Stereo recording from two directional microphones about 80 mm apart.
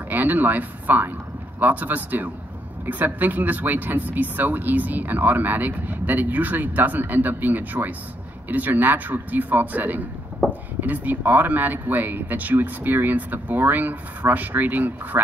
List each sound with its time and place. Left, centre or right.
0.1 s speech: right